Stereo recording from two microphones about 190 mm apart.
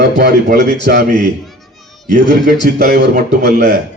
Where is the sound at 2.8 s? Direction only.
50° right (ahead or behind).